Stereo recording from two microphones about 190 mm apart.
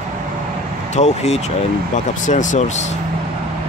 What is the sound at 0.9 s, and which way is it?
Speech, 35° left (ahead or behind).